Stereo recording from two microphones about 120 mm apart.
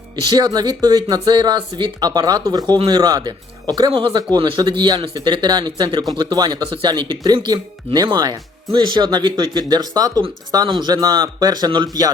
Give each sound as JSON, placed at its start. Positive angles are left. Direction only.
{"t": 0.3, "sound": "speech", "side_deg": -35}